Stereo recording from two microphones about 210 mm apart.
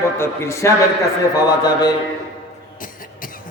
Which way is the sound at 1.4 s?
20° left (ahead or behind).